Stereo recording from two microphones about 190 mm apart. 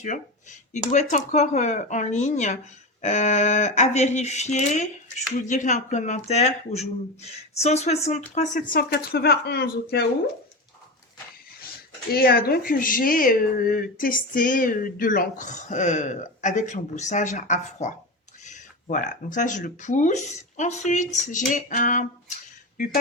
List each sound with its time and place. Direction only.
0.9 s speech: 40° left (ahead or behind); by 10.1 s 60° left (ahead or behind)
12.1 s speech: 55° left (ahead or behind)